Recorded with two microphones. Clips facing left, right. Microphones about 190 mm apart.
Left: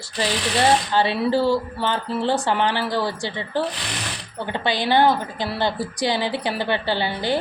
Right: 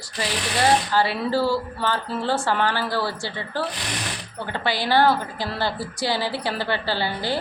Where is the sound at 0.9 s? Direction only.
20° left (ahead or behind).